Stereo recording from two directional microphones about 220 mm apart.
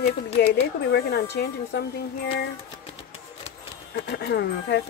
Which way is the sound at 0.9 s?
50° left (ahead or behind).